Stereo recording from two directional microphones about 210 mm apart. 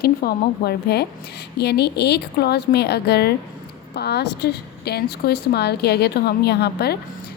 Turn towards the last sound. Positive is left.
turn(degrees=50)  # may be behind; listen again after turning